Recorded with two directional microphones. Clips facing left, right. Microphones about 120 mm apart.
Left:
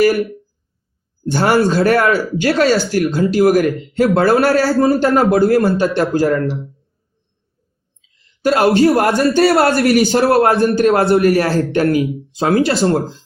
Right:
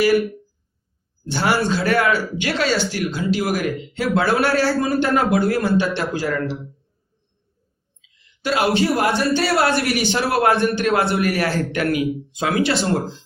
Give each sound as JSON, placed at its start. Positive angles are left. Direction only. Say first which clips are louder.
{"t": 1.3, "sound": "speech", "louder": "left 6 dB", "side_deg": 45}
{"t": 8.0, "sound": "speech", "louder": "left 8 dB", "side_deg": 40}